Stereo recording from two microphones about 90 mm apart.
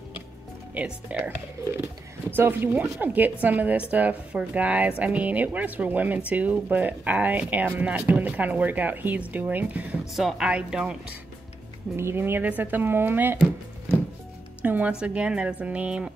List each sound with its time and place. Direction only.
0.7 s speech: 15° right (ahead or behind)
2.3 s speech: 25° right (ahead or behind)
10.1 s speech: 5° right (ahead or behind)
12.0 s speech: 25° right (ahead or behind)
14.6 s speech: 15° right (ahead or behind)